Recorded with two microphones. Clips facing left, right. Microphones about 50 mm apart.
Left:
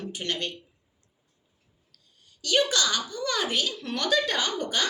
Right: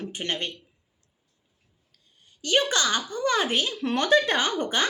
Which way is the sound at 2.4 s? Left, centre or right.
Right.